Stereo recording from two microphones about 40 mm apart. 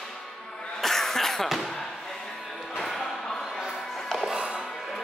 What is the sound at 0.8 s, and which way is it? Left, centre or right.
Cough, centre.